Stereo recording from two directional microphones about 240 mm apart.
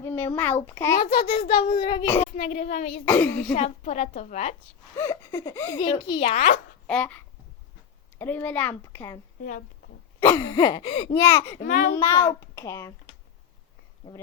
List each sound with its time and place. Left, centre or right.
0.0 s a child's voice: centre
0.9 s a child's voice: left
1.4 s speech: centre
2.2 s speech: left
3.1 s speech: centre
3.5 s speech: left
4.9 s speech: centre; by 6.6 s left
6.8 s a child's voice: centre
8.2 s speech: centre
10.2 s speech: centre
11.5 s a child's voice: left
12.5 s speech: centre
14.1 s speech: centre